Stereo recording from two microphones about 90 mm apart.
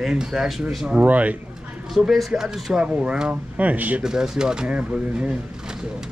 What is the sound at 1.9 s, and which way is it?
Speech, centre (ahead or behind).